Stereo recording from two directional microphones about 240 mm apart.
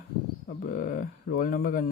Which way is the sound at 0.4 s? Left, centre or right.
Left.